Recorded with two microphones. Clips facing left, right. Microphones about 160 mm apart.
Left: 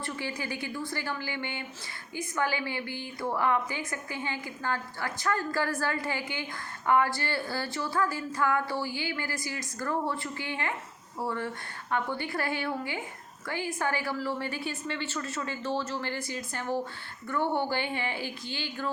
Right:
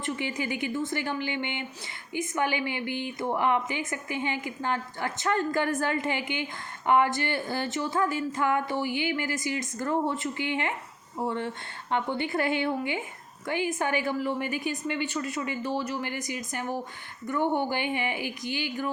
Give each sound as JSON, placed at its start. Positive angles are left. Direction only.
{"t": 0.0, "sound": "a woman's voice", "side_deg": -20}